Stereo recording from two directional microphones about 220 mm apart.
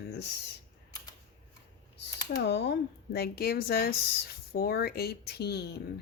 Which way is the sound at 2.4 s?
50° left (ahead or behind).